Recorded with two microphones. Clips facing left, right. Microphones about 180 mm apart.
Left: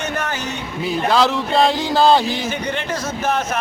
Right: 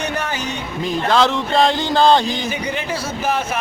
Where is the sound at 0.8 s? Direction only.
5° left (ahead or behind).